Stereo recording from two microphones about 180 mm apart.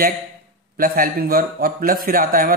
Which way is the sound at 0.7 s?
50° right (ahead or behind).